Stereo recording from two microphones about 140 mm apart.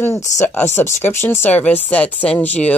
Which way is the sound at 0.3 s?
55° left (ahead or behind).